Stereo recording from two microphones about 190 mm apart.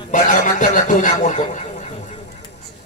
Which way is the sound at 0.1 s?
40° left (ahead or behind).